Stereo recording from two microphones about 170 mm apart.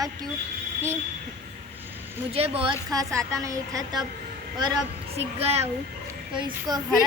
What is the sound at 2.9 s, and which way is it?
A woman's voice, 20° right (ahead or behind).